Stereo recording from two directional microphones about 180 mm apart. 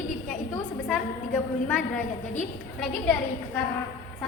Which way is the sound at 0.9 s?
10° left (ahead or behind).